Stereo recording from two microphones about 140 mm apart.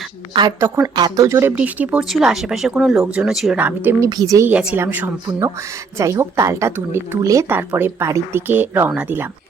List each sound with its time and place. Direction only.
0.6 s speech: 30° right (ahead or behind); by 3.6 s centre (ahead or behind)
3.6 s speech: 10° right (ahead or behind)
4.1 s a woman's voice: 25° right (ahead or behind)
4.7 s speech: 15° right (ahead or behind)